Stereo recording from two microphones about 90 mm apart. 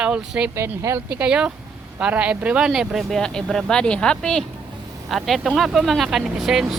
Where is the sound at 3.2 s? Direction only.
5° left (ahead or behind).